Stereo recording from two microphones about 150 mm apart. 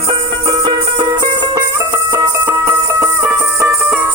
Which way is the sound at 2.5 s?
15° right (ahead or behind).